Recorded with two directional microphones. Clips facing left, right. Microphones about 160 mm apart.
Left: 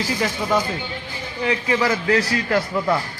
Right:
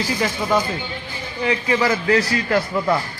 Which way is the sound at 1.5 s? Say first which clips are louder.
Right 1 dB; 25° right (ahead or behind).